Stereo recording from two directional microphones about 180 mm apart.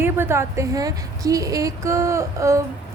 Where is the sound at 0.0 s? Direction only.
15° right (ahead or behind).